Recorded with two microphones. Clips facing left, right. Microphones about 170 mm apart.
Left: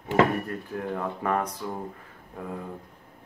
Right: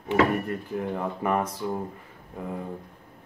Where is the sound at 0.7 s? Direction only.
5° right (ahead or behind).